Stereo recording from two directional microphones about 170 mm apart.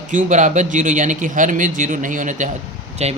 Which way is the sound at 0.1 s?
50° right (ahead or behind).